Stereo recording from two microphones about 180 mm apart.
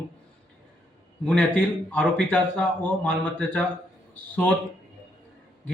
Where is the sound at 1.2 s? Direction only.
5° left (ahead or behind).